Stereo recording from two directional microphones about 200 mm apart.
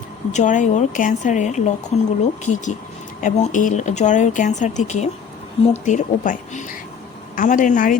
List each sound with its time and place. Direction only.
0.3 s speech: 40° left (ahead or behind)